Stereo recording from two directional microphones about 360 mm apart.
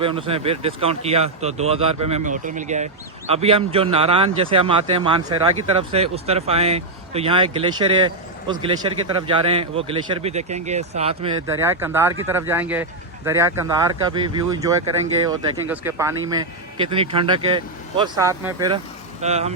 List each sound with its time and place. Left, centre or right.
0.0 s speech: centre